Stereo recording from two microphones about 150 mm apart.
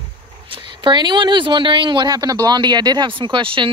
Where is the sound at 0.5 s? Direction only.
30° right (ahead or behind).